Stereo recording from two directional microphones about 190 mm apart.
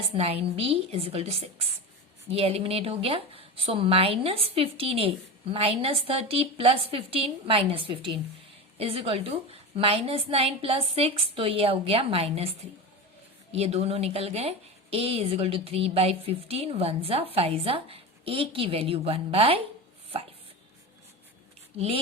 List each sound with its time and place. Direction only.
0.1 s a woman's voice: 30° right (ahead or behind)
13.5 s a woman's voice: 35° right (ahead or behind)
21.8 s a woman's voice: 30° right (ahead or behind)